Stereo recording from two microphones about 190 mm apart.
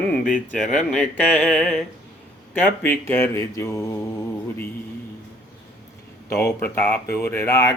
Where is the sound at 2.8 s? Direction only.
10° left (ahead or behind).